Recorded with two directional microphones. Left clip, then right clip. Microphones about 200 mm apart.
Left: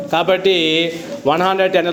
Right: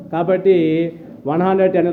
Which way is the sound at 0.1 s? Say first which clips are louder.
Even; centre (ahead or behind).